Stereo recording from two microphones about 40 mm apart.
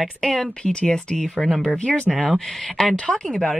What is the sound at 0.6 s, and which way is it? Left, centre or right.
Speech, centre.